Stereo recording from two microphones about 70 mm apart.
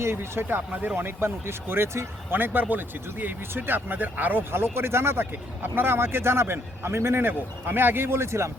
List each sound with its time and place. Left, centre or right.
0.0 s speech: right
2.4 s speech: right